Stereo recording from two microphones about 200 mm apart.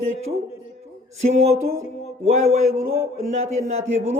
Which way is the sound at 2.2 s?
30° right (ahead or behind).